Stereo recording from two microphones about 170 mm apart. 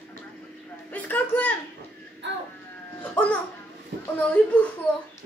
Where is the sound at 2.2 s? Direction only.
90° right.